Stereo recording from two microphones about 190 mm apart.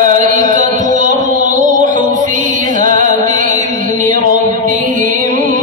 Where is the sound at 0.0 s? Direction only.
40° right (ahead or behind).